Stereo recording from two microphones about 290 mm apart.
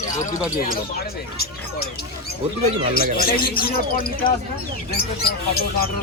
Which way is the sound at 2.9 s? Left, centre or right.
Left.